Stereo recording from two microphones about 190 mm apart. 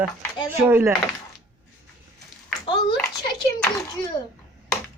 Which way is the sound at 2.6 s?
25° left (ahead or behind).